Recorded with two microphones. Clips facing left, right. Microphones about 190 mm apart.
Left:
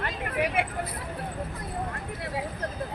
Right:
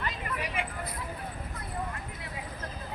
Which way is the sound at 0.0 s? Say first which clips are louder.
Left 6 dB; 65° left (ahead or behind).